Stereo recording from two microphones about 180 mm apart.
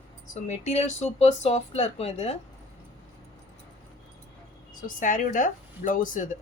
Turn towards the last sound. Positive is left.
turn(degrees=45)  # may be behind; listen again after turning